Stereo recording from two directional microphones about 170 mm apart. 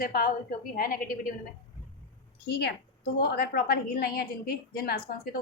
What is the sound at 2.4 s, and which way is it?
A woman's voice, 75° left (ahead or behind).